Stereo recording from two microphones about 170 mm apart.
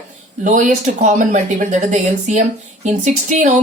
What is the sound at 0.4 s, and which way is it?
Speech, 45° right (ahead or behind).